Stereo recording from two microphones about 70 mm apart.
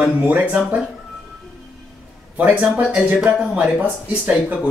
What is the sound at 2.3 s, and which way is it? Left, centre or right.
A woman's voice, right.